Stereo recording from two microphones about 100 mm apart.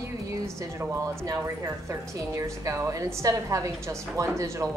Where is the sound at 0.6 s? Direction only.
35° right (ahead or behind).